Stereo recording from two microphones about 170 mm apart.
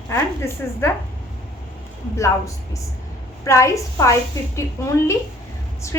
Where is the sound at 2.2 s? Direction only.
20° left (ahead or behind).